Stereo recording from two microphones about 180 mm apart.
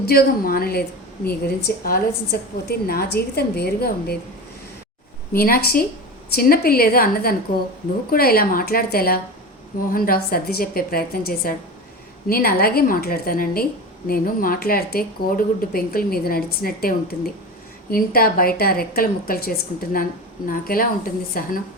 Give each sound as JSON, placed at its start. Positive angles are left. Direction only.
{"t": 0.0, "sound": "speech", "side_deg": 60}
{"t": 5.3, "sound": "a woman's voice", "side_deg": 55}